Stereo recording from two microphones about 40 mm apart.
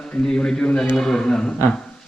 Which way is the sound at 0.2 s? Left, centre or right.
Centre.